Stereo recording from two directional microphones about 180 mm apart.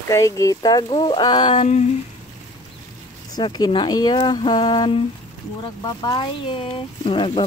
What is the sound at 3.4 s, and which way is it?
Speech, 25° left (ahead or behind).